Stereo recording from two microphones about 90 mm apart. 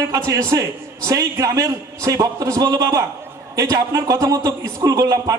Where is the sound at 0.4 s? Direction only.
35° right (ahead or behind).